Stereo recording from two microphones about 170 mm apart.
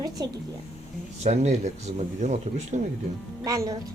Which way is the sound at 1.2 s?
40° right (ahead or behind).